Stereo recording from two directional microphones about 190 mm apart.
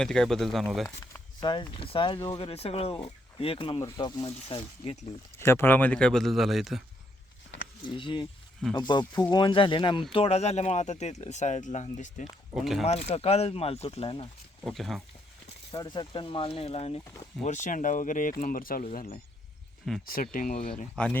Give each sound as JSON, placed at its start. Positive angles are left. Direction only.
{"t": 0.0, "sound": "speech", "side_deg": 5}
{"t": 1.1, "sound": "speech", "side_deg": 25}
{"t": 4.3, "sound": "speech", "side_deg": 30}
{"t": 5.4, "sound": "speech", "side_deg": 10}
{"t": 7.9, "sound": "speech", "side_deg": 25}
{"t": 14.6, "sound": "speech", "side_deg": 0}
{"t": 15.7, "sound": "speech", "side_deg": 20}
{"t": 19.9, "sound": "speech", "side_deg": 0}
{"t": 20.3, "sound": "speech", "side_deg": 45}
{"t": 20.9, "sound": "speech", "side_deg": 5}